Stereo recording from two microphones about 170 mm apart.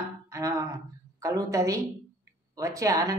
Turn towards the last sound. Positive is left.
turn(degrees=-20)  # may be behind; listen again after turning